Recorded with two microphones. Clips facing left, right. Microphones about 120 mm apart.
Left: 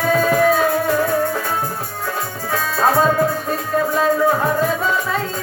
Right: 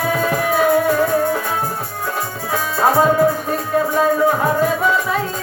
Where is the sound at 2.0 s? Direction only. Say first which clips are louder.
Right 1 dB; 15° right (ahead or behind).